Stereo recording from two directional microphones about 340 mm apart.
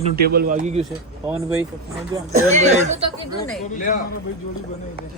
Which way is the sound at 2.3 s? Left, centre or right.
Centre.